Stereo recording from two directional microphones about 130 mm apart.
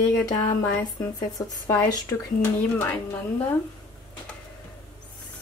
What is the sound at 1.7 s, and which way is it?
Speech, 30° left (ahead or behind).